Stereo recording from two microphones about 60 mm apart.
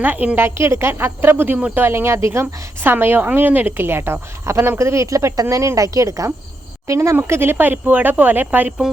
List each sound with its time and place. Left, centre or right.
0.0 s speech: right
0.4 s a woman's voice: right
2.8 s a woman's voice: right
7.3 s speech: right
7.5 s speech: right